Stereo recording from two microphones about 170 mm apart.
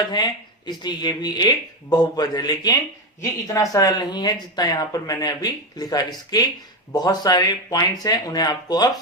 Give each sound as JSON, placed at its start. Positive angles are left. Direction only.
{"t": 0.0, "sound": "speech", "side_deg": 25}